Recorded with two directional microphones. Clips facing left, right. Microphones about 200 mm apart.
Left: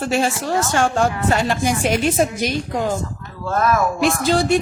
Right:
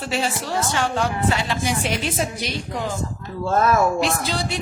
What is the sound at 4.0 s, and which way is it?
Speech, 50° left (ahead or behind).